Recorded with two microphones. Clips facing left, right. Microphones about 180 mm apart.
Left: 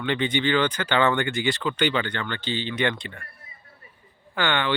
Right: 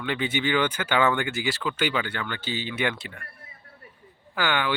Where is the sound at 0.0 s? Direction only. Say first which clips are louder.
Left 3 dB; 5° right (ahead or behind).